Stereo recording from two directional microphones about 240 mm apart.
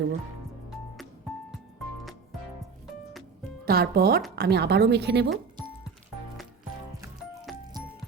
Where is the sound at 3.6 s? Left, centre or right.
Right.